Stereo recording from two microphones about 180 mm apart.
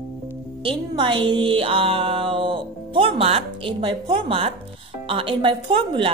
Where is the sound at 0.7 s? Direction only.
25° right (ahead or behind).